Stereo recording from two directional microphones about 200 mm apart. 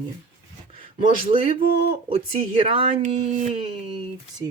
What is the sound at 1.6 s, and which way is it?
Speech, 50° left (ahead or behind).